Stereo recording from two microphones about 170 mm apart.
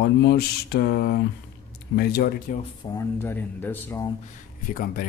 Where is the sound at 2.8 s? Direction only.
15° left (ahead or behind).